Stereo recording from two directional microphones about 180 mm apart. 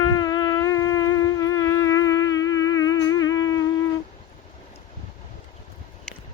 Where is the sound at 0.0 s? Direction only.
20° left (ahead or behind).